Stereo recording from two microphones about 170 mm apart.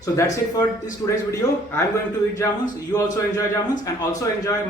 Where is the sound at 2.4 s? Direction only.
15° left (ahead or behind).